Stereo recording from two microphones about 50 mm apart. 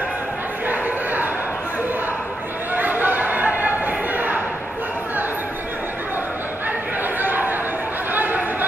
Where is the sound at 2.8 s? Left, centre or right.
Right.